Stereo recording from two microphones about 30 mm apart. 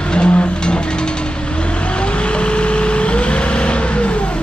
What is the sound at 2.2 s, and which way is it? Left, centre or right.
Vehicle, left.